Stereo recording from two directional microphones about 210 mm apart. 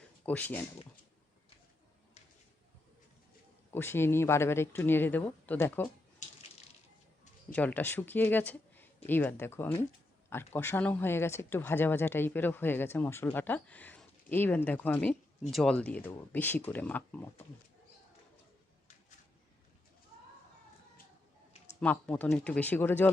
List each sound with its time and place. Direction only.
0.3 s speech: 10° left (ahead or behind)
3.7 s speech: 10° left (ahead or behind)
7.5 s speech: 10° left (ahead or behind)
21.8 s speech: 5° left (ahead or behind)